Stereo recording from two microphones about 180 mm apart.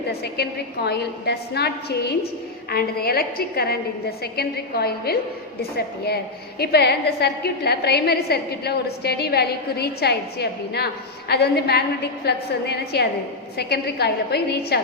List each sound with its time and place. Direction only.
0.2 s a woman's voice: 65° left (ahead or behind)
6.6 s a woman's voice: 60° left (ahead or behind)